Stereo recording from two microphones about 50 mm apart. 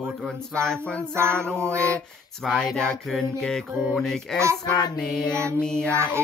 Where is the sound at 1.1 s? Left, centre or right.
Right.